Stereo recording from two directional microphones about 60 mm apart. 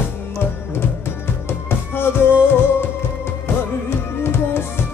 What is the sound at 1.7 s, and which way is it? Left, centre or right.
Music, left.